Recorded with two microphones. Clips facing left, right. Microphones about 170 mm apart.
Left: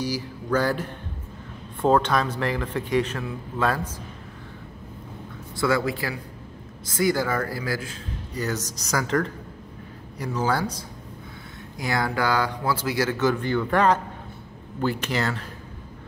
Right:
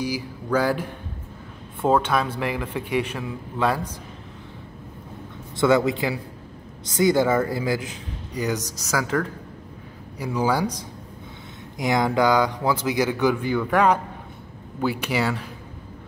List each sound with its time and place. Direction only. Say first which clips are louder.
0.0 s a man's voice: right 1 dB; 10° right (ahead or behind)
5.6 s a man's voice: right 5 dB; 20° right (ahead or behind)